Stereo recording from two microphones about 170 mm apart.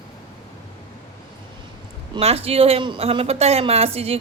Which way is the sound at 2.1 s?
35° right (ahead or behind).